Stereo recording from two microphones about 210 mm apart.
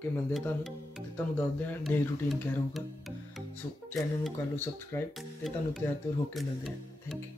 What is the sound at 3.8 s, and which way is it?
Speech, 10° left (ahead or behind).